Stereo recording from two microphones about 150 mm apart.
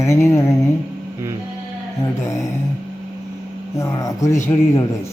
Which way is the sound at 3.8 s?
20° left (ahead or behind).